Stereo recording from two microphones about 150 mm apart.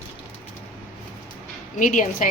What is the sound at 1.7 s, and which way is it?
Speech, 60° left (ahead or behind).